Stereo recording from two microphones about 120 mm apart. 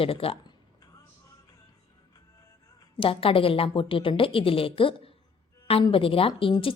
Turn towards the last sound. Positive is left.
turn(degrees=50)  # may be behind; listen again after turning